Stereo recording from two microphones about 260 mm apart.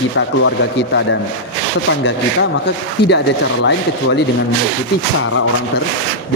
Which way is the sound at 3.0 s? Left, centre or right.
Left.